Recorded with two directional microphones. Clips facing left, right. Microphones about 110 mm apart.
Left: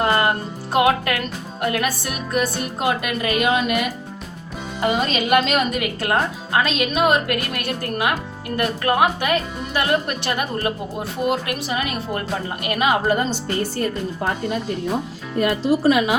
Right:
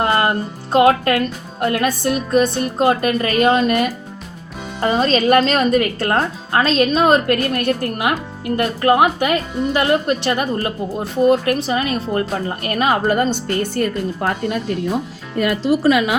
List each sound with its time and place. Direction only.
0.8 s a woman's voice: 35° right (ahead or behind); by 13.8 s 55° right (ahead or behind)
15.4 s speech: 90° right